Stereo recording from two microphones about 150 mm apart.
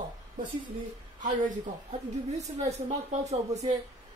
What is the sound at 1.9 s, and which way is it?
A woman's voice, 45° right (ahead or behind).